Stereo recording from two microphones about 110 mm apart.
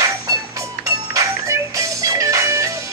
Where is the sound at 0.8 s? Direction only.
30° right (ahead or behind).